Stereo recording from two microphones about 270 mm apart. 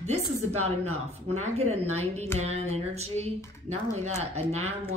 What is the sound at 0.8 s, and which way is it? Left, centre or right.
Speech, right.